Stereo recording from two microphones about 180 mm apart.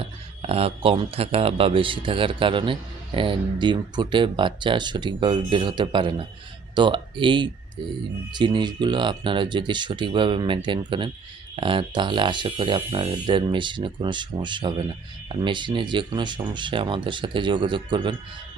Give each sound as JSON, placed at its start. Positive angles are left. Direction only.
{"t": 0.4, "sound": "speech", "side_deg": -35}